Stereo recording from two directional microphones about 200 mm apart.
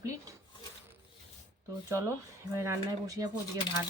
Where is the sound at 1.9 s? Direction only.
15° right (ahead or behind).